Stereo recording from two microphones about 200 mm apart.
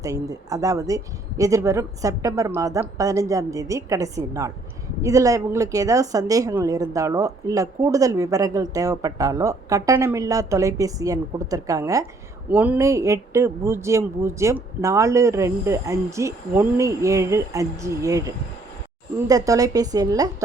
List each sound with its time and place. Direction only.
0.0 s a woman's voice: 15° right (ahead or behind)